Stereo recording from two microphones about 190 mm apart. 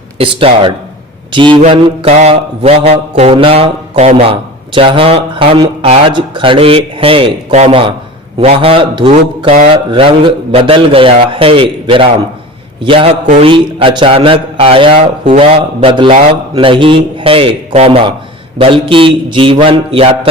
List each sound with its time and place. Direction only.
0.2 s a man's voice: 30° right (ahead or behind)